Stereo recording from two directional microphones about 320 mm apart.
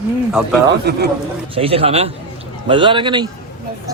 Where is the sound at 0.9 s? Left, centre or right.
Right.